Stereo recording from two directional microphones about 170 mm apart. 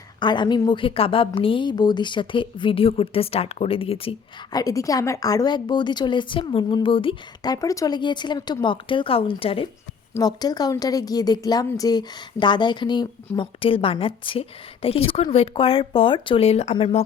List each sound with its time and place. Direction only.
0.2 s a woman's voice: 25° left (ahead or behind)
4.5 s a woman's voice: 20° left (ahead or behind); by 17.0 s 35° left (ahead or behind)